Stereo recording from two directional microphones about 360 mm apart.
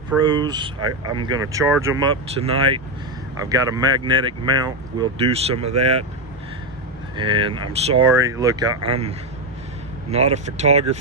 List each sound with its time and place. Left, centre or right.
0.3 s speech: centre
7.2 s speech: centre